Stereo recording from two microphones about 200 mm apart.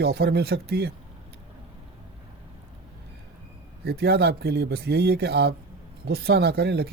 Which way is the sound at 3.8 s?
55° right (ahead or behind).